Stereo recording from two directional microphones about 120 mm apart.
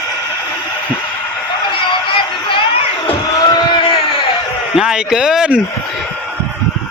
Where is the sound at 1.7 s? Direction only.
45° left (ahead or behind).